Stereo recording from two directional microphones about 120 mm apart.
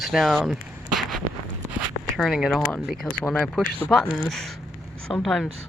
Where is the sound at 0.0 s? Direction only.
Centre (ahead or behind).